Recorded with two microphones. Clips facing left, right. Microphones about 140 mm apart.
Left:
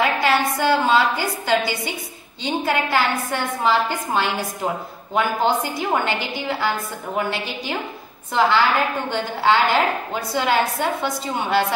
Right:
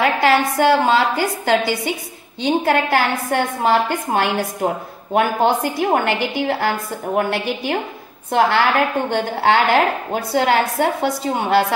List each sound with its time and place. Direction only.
0.0 s a woman's voice: 60° right (ahead or behind)